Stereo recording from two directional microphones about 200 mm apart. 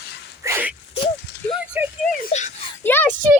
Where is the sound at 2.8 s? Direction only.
10° left (ahead or behind).